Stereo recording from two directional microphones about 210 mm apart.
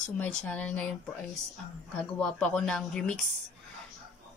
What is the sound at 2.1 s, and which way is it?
Speech, 5° left (ahead or behind).